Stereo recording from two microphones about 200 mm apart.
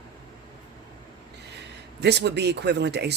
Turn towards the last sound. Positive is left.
turn(degrees=-55)  # may be behind; listen again after turning